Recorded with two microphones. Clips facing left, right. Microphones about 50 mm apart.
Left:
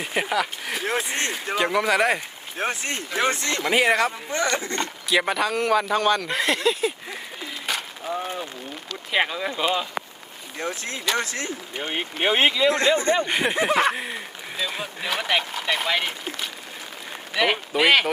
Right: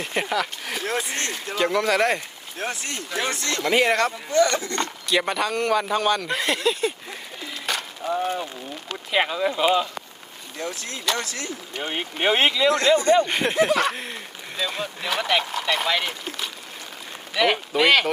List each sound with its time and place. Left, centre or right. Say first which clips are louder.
0.0 s speech: left 1 dB; centre
0.9 s speech: left 1 dB; centre
1.5 s speech: even; centre
2.6 s speech: left 3 dB; left
3.6 s speech: even; centre
4.3 s speech: right 4 dB; left
5.0 s speech: left 2 dB; centre
7.7 s a sound: right 1 dB; centre
8.0 s speech: right 6 dB; centre
10.6 s speech: left 2 dB; left
11.8 s speech: even; centre
12.7 s speech: right 3 dB; left
13.2 s speech: right 1 dB; centre